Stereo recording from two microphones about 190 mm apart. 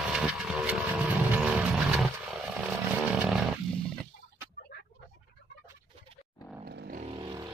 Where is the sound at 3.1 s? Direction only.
5° right (ahead or behind).